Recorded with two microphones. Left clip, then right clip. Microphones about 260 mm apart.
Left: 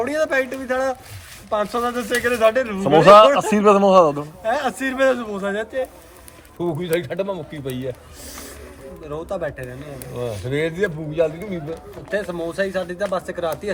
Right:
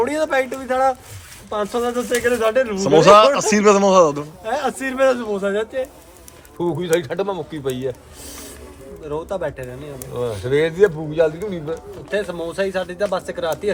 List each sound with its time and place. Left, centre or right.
0.0 s speech: centre
10.2 s speech: centre